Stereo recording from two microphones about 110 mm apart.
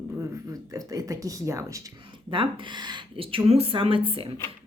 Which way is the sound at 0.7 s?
30° right (ahead or behind).